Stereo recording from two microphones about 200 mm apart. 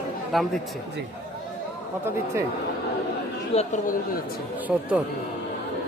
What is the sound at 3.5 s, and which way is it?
Speech, 30° left (ahead or behind).